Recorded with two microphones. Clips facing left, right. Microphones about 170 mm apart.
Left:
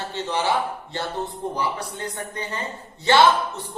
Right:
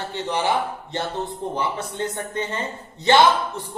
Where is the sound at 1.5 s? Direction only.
25° right (ahead or behind).